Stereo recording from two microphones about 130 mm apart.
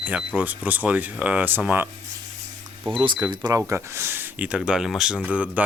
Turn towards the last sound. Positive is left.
turn(degrees=-10)  # may be behind; listen again after turning